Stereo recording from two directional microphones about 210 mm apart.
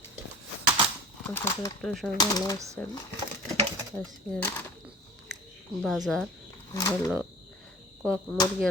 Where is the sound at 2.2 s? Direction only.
20° left (ahead or behind).